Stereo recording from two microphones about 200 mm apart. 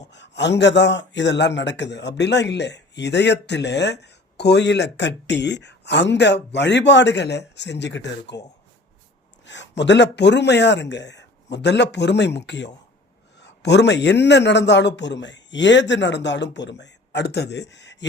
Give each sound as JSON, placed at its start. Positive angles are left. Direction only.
{"t": 0.1, "sound": "a man's voice", "side_deg": 60}
{"t": 9.5, "sound": "a man's voice", "side_deg": 60}